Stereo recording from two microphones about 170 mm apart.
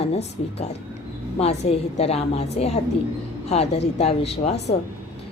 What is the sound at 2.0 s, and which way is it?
A woman's voice, 35° left (ahead or behind).